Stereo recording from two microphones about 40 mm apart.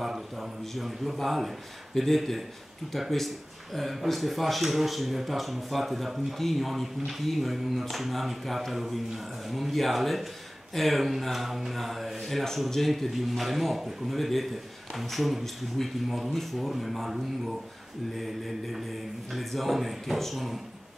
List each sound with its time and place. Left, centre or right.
0.0 s speech: centre